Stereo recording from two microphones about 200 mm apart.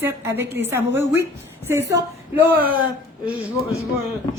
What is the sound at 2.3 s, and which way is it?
Speech, 10° right (ahead or behind).